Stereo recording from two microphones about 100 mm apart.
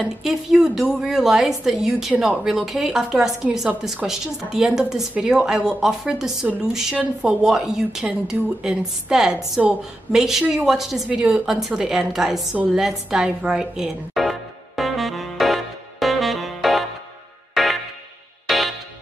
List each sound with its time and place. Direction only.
0.0 s a woman's voice: 5° right (ahead or behind)
14.8 s saxophone: centre (ahead or behind)
17.6 s music: 5° right (ahead or behind)